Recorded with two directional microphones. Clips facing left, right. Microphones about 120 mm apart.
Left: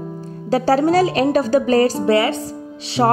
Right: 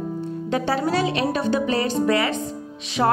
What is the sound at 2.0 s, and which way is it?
Speech, 30° left (ahead or behind).